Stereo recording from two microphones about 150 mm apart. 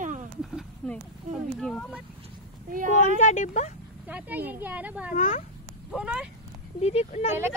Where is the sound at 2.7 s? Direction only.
65° right (ahead or behind).